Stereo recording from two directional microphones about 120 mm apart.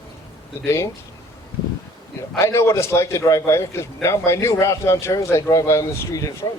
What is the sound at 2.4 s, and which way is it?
A man's voice, 25° left (ahead or behind).